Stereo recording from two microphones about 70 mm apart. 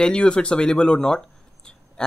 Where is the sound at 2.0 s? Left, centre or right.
Centre.